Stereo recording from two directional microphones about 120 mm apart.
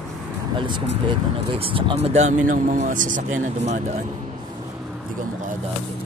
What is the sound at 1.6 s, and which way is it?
Speech, 50° right (ahead or behind).